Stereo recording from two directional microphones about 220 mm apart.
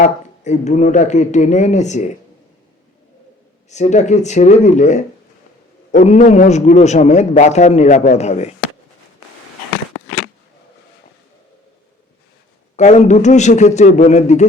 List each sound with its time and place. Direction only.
0.0 s a man's voice: 30° left (ahead or behind)
3.7 s a man's voice: 30° left (ahead or behind)
12.7 s a man's voice: 30° left (ahead or behind)